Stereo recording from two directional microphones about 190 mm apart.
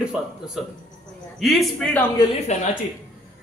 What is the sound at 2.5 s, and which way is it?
Speech, 35° left (ahead or behind).